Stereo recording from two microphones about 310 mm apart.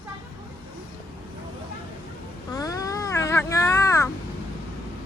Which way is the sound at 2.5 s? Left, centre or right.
Centre.